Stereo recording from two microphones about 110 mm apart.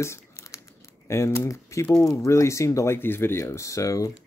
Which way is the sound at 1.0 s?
25° left (ahead or behind).